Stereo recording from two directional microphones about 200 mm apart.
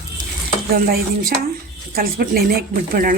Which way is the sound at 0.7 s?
45° right (ahead or behind).